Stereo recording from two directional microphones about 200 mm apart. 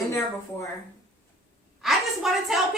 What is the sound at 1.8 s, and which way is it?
Speech, centre (ahead or behind).